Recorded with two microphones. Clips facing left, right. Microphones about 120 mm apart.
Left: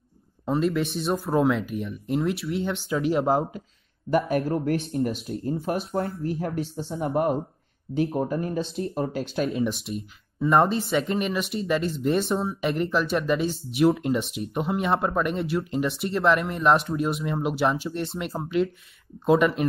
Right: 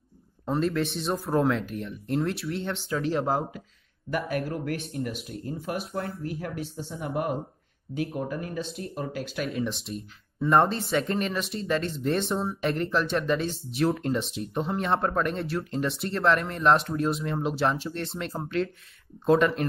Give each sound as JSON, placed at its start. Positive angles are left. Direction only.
{"t": 0.5, "sound": "speech", "side_deg": 0}
{"t": 3.1, "sound": "speech", "side_deg": 15}
{"t": 4.1, "sound": "speech", "side_deg": 30}
{"t": 9.8, "sound": "speech", "side_deg": 0}